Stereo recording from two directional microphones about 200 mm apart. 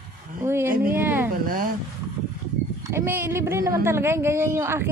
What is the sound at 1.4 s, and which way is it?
Speech, 45° right (ahead or behind).